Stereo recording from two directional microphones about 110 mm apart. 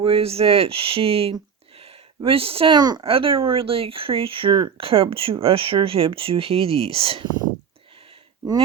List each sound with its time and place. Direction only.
0.0 s speech: 60° right (ahead or behind)
1.8 s a sound: 60° right (ahead or behind)
2.7 s speech: 40° right (ahead or behind)
3.0 s speech: 55° right (ahead or behind)